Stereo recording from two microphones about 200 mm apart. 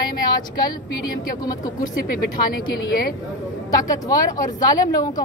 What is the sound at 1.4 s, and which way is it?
Speech, 20° left (ahead or behind).